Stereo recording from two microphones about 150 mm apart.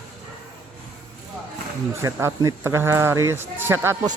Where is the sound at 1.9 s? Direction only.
20° right (ahead or behind).